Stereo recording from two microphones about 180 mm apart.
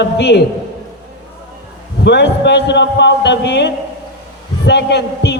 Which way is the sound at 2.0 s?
70° left (ahead or behind).